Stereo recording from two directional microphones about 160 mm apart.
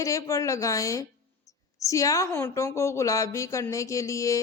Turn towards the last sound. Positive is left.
turn(degrees=20)  # may be behind; listen again after turning